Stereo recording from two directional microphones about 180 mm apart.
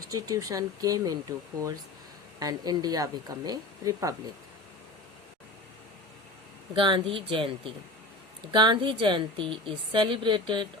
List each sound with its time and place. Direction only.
0.1 s a woman's voice: 20° right (ahead or behind)
2.4 s a woman's voice: 20° right (ahead or behind)
6.7 s a woman's voice: 25° right (ahead or behind)